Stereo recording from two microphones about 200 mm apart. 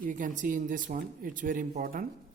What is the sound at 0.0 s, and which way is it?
A man's voice, 40° right (ahead or behind).